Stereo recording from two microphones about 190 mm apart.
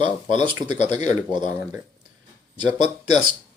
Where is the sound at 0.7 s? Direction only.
40° left (ahead or behind).